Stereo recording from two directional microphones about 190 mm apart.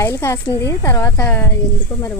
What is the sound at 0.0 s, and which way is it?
Speech, 15° left (ahead or behind).